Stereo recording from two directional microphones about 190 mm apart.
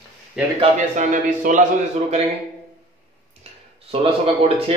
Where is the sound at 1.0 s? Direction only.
40° right (ahead or behind).